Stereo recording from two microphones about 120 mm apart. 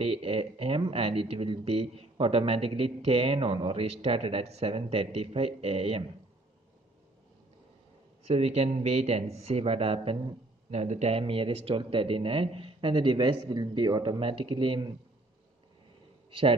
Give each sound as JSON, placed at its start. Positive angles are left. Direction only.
{"t": 0.0, "sound": "speech", "side_deg": -55}
{"t": 8.3, "sound": "speech", "side_deg": -60}
{"t": 10.7, "sound": "speech", "side_deg": -65}
{"t": 16.3, "sound": "a sound", "side_deg": -50}